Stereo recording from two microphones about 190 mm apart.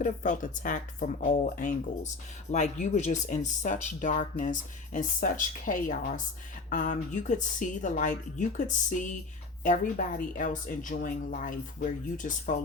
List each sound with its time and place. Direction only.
0.0 s speech: 40° left (ahead or behind)